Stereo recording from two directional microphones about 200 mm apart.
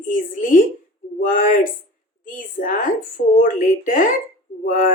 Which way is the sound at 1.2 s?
40° left (ahead or behind).